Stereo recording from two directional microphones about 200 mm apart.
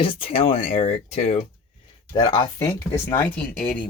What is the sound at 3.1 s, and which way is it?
Speech, 10° left (ahead or behind).